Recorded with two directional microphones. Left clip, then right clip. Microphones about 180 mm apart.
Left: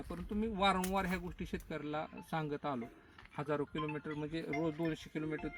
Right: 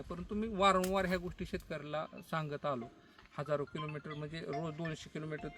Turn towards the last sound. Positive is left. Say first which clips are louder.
# left 2 dB
turn(degrees=-15)  # may be behind; listen again after turning